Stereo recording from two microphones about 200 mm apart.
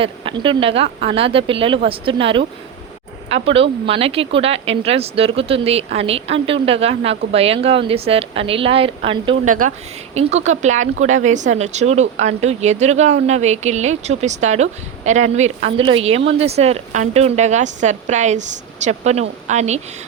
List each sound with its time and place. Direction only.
0.0 s speech: 25° right (ahead or behind)